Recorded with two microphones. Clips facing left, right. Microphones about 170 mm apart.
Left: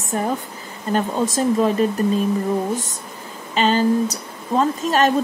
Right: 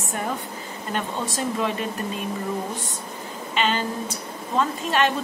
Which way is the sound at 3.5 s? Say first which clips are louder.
Left 8 dB; 40° left (ahead or behind).